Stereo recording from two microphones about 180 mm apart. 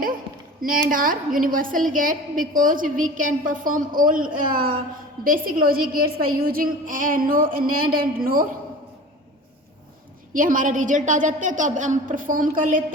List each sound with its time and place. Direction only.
0.6 s a woman's voice: 50° right (ahead or behind)
10.3 s a woman's voice: 45° right (ahead or behind)